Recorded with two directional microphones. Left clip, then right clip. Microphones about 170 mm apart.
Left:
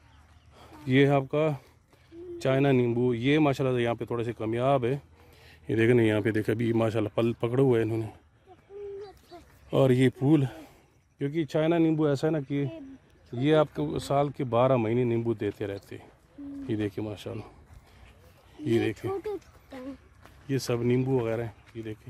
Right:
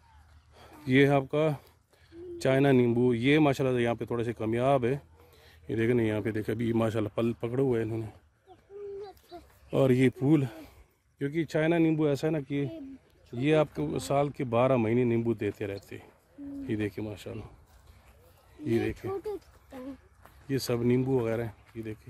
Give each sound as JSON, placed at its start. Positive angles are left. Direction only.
{"t": 0.6, "sound": "speech", "side_deg": 5}
{"t": 2.0, "sound": "speech", "side_deg": -10}
{"t": 5.5, "sound": "speech", "side_deg": 40}
{"t": 6.6, "sound": "speech", "side_deg": 20}
{"t": 7.2, "sound": "a man's voice", "side_deg": 35}
{"t": 9.7, "sound": "speech", "side_deg": 15}
{"t": 16.6, "sound": "a man's voice", "side_deg": 25}
{"t": 18.6, "sound": "speech", "side_deg": 35}
{"t": 20.4, "sound": "speech", "side_deg": 15}